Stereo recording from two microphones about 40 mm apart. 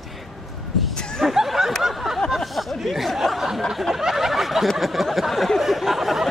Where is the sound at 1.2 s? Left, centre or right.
Centre.